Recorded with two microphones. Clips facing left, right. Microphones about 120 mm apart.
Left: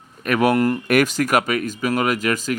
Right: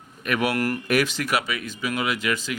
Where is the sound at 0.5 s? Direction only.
25° left (ahead or behind).